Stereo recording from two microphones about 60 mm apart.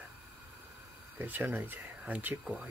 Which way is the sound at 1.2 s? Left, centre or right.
Right.